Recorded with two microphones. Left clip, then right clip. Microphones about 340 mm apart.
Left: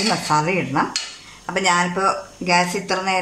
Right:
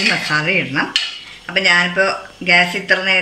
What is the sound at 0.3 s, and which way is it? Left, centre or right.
Speech, centre.